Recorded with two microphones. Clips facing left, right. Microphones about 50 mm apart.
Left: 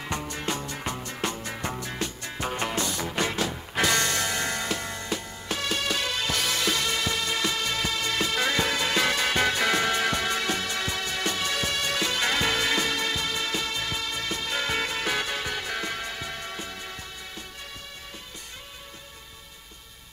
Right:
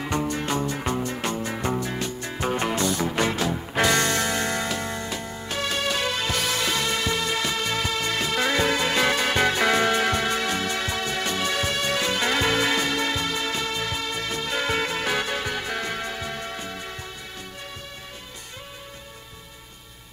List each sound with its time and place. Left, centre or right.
0.0 s music: centre
1.1 s music: centre